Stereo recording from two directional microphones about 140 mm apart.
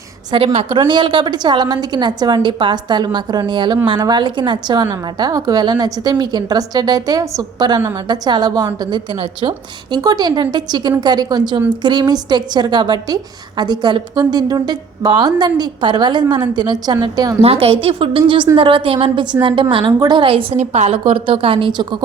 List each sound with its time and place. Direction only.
0.3 s a woman's voice: 40° right (ahead or behind)
17.4 s a woman's voice: 45° right (ahead or behind)
21.0 s a woman's voice: 40° right (ahead or behind)